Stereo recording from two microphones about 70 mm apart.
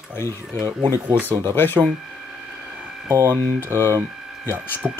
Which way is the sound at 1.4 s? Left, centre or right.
Left.